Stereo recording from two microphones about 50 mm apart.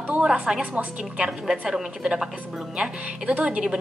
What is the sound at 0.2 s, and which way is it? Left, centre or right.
Speech, centre.